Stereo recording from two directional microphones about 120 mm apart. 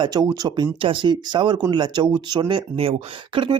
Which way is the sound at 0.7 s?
45° right (ahead or behind).